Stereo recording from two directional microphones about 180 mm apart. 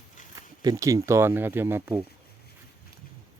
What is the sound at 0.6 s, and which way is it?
Speech, 20° right (ahead or behind).